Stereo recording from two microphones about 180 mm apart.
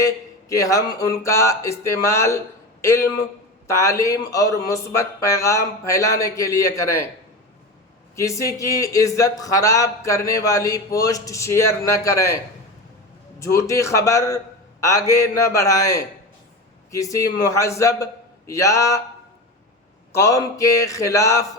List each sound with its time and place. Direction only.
0.0 s a man's voice: 20° left (ahead or behind)
8.1 s a man's voice: 15° left (ahead or behind)
13.4 s a man's voice: 15° left (ahead or behind)
20.1 s a man's voice: 15° left (ahead or behind)